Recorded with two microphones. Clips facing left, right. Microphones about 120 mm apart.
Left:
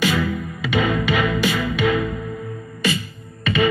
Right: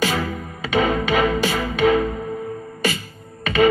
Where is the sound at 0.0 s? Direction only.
35° right (ahead or behind).